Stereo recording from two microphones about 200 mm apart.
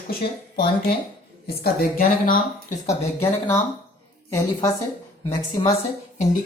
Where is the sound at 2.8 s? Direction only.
15° left (ahead or behind).